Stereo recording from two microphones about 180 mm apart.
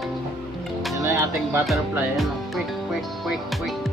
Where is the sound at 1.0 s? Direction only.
15° right (ahead or behind).